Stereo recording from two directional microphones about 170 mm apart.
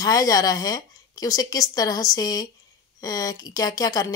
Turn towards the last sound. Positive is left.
turn(degrees=20)  # may be behind; listen again after turning